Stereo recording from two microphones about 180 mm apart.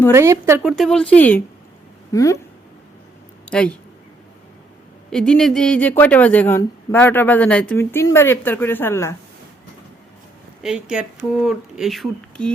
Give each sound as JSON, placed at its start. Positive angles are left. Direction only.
{"t": 0.1, "sound": "speech", "side_deg": -15}
{"t": 0.6, "sound": "speech", "side_deg": 0}
{"t": 3.5, "sound": "speech", "side_deg": 5}
{"t": 5.1, "sound": "speech", "side_deg": 5}
{"t": 10.6, "sound": "speech", "side_deg": -5}